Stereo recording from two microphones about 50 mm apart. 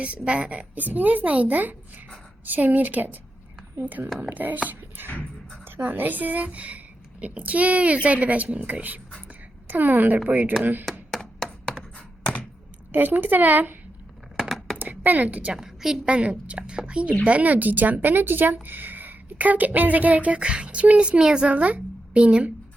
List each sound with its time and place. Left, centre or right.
0.0 s a woman's voice: right
0.8 s speech: right
11.1 s a sound: centre
12.9 s speech: right
14.3 s a sound: centre
14.8 s speech: right
15.5 s a woman's voice: centre
16.0 s a woman's voice: right
21.2 s a woman's voice: centre
21.5 s a woman's voice: right